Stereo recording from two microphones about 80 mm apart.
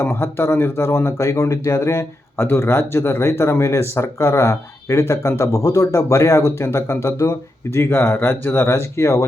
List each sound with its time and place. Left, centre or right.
0.0 s speech: left